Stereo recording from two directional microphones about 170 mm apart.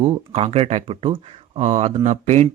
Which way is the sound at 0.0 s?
40° right (ahead or behind).